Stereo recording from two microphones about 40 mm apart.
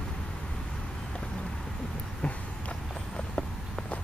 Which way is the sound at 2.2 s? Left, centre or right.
Left.